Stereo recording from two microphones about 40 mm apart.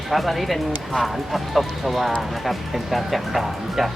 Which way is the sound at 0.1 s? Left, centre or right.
Centre.